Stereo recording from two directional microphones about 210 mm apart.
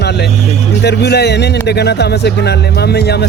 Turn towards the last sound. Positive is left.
turn(degrees=50)  # may be behind; listen again after turning